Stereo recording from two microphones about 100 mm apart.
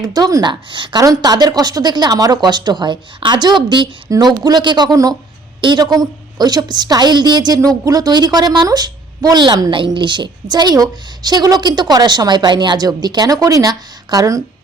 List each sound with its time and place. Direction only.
0.0 s speech: 40° right (ahead or behind)
0.7 s a woman's voice: 55° right (ahead or behind)
1.0 s a woman's voice: 35° right (ahead or behind)